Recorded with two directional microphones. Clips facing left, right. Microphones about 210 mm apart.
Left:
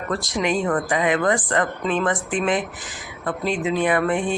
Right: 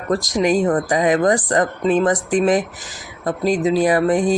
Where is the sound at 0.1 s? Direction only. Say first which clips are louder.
Right 6 dB; 40° right (ahead or behind).